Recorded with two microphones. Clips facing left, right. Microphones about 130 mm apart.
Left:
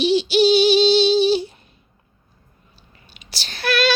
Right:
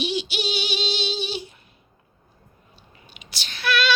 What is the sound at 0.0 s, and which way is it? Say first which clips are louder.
Child singing: left 11 dB; 30° left (ahead or behind).